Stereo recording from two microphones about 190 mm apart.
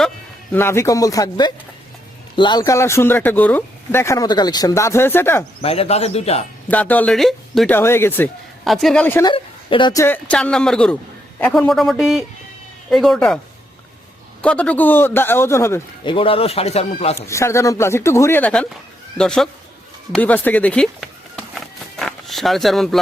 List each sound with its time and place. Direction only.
0.5 s speech: 15° left (ahead or behind)
5.6 s speech: 30° left (ahead or behind)
6.7 s speech: 10° left (ahead or behind)
7.8 s speech: 10° left (ahead or behind)
9.2 s speech: 25° left (ahead or behind); by 13.4 s 5° left (ahead or behind)
14.4 s speech: 5° left (ahead or behind)
16.0 s speech: 30° left (ahead or behind)
17.2 s speech: 15° left (ahead or behind)
20.1 s a sound: 10° left (ahead or behind)